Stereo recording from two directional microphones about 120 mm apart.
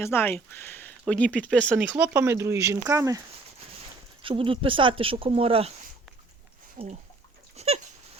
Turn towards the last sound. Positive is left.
turn(degrees=-65)  # may be behind; listen again after turning